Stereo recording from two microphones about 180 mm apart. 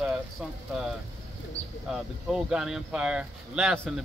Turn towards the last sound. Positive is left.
turn(degrees=-5)  # may be behind; listen again after turning